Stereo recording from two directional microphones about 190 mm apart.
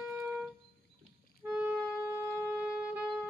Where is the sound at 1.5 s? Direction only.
5° right (ahead or behind).